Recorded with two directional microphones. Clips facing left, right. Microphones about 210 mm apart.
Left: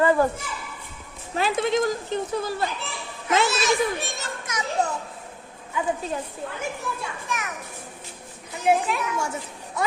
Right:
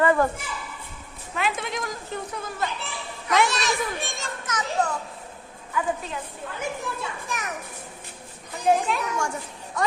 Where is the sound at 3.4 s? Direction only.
Centre (ahead or behind).